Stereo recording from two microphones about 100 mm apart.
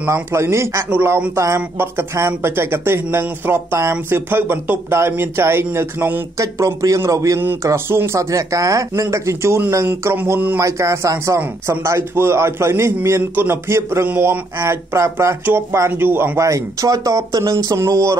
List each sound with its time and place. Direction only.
0.0 s speech: 25° right (ahead or behind)
6.3 s a man's voice: 35° right (ahead or behind)
16.3 s a man's voice: 30° right (ahead or behind)